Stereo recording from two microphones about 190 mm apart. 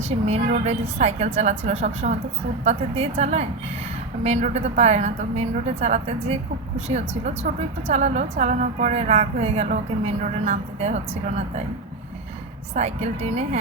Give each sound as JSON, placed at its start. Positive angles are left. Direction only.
{"t": 0.6, "sound": "a woman's voice", "side_deg": -35}
{"t": 12.7, "sound": "a woman's voice", "side_deg": -35}